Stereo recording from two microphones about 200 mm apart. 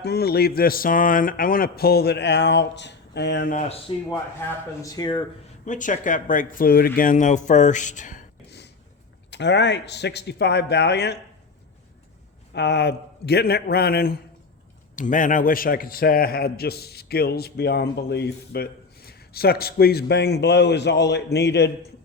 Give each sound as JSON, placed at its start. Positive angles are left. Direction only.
{"t": 0.0, "sound": "a man's voice", "side_deg": 55}
{"t": 3.5, "sound": "speech", "side_deg": 35}
{"t": 4.4, "sound": "speech", "side_deg": 10}
{"t": 5.6, "sound": "speech", "side_deg": 40}
{"t": 8.4, "sound": "a sound", "side_deg": 55}
{"t": 9.3, "sound": "speech", "side_deg": 60}
{"t": 12.5, "sound": "a man's voice", "side_deg": 60}
{"t": 14.9, "sound": "a man's voice", "side_deg": 40}